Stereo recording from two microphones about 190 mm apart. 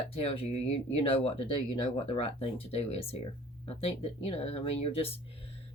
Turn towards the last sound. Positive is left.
turn(degrees=30)  # may be behind; listen again after turning